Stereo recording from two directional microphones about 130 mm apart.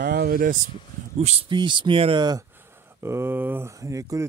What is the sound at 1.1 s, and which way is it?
Speech, 55° right (ahead or behind).